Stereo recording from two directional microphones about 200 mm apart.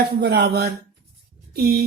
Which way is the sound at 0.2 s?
55° right (ahead or behind).